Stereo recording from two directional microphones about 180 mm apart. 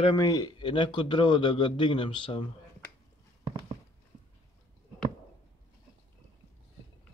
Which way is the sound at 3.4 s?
30° right (ahead or behind).